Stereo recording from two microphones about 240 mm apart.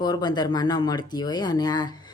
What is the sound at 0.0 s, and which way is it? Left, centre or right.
Speech, centre.